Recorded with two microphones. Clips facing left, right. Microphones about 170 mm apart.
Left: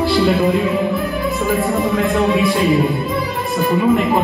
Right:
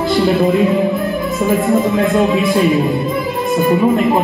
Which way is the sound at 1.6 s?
20° right (ahead or behind).